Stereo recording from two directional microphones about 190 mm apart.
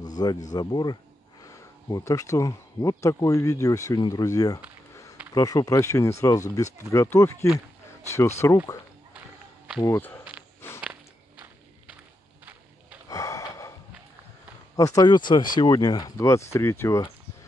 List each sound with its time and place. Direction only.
0.0 s a sound: 20° left (ahead or behind)
0.5 s speech: 20° left (ahead or behind)
8.4 s speech: 15° left (ahead or behind)
9.8 s speech: 10° left (ahead or behind)
10.8 s biting: 5° right (ahead or behind)
13.1 s a sound: 15° left (ahead or behind)
14.8 s speech: 20° left (ahead or behind)